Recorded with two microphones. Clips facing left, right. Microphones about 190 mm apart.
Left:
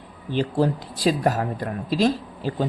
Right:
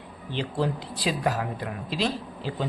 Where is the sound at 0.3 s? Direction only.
45° left (ahead or behind).